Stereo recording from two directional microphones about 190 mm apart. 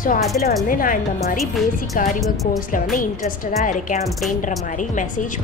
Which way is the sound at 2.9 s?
45° left (ahead or behind).